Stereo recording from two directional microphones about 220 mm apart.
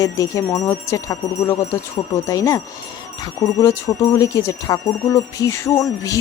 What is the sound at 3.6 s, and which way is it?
Speech, 15° left (ahead or behind).